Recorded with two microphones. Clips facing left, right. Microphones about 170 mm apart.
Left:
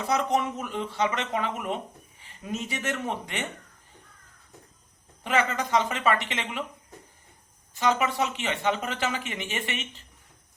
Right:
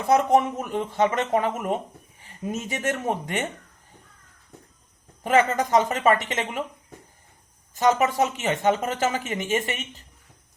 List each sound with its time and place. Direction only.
0.0 s speech: 50° right (ahead or behind)
5.2 s speech: 45° right (ahead or behind)
7.7 s speech: 45° right (ahead or behind)